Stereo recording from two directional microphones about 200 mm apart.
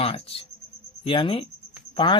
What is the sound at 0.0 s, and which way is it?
Speech, 30° left (ahead or behind).